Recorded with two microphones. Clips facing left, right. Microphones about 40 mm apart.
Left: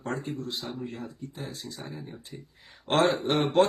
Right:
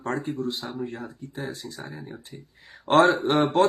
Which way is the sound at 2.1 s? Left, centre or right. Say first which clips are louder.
Right 1 dB; centre.